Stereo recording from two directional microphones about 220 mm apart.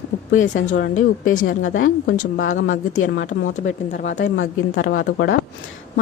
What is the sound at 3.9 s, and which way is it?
Speech, 40° left (ahead or behind).